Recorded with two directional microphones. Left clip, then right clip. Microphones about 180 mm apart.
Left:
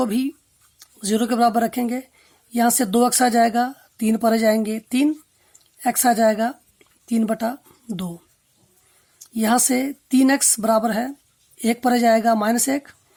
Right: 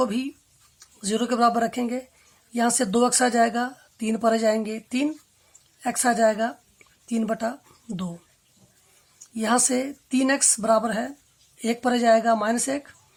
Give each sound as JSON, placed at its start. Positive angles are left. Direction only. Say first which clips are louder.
{"t": 0.0, "sound": "speech", "louder": "left 2 dB", "side_deg": 25}
{"t": 9.3, "sound": "speech", "louder": "left 3 dB", "side_deg": 25}